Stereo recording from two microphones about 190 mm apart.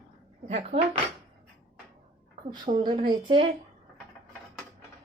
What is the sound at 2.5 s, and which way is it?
Speech, 25° right (ahead or behind).